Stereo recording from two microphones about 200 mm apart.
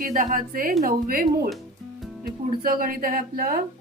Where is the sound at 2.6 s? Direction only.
45° right (ahead or behind).